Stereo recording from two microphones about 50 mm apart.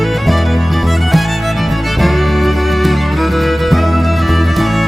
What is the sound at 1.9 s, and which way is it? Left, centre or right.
Music, centre.